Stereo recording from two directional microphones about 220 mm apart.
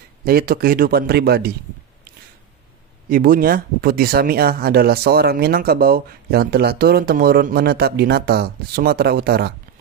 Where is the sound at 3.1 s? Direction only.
40° right (ahead or behind).